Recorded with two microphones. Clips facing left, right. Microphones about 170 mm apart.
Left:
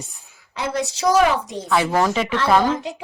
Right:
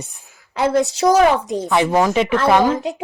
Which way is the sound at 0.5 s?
55° right (ahead or behind).